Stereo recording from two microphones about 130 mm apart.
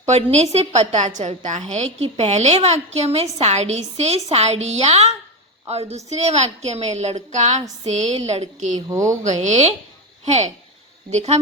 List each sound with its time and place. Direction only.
0.0 s a woman's voice: 55° right (ahead or behind)
8.9 s speech: 25° right (ahead or behind)
9.2 s a woman's voice: 65° right (ahead or behind)